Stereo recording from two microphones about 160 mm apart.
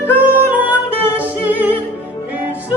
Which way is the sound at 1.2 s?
10° right (ahead or behind).